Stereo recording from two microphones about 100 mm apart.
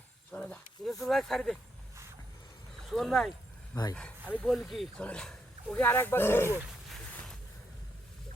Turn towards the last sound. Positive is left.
turn(degrees=25)  # may be behind; listen again after turning